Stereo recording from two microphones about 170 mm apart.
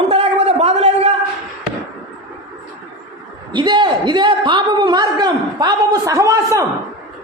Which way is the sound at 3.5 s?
25° right (ahead or behind).